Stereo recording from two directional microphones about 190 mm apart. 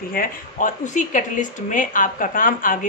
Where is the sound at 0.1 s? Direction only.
45° left (ahead or behind).